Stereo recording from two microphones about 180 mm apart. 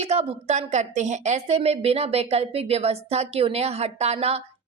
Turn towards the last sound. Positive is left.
turn(degrees=-35)  # may be behind; listen again after turning